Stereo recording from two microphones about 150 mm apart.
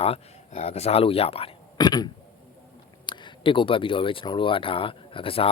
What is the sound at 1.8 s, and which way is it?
Speech, 25° left (ahead or behind).